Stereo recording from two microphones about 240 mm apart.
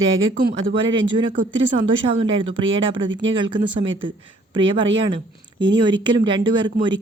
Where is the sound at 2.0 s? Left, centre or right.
Right.